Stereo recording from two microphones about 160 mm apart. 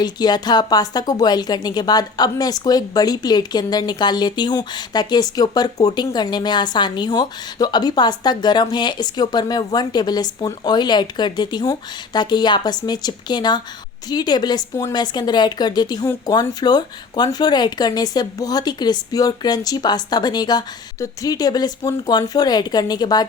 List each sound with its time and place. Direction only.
0.0 s a woman's voice: 25° left (ahead or behind)